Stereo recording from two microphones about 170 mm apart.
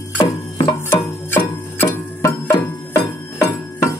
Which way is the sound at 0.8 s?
15° left (ahead or behind).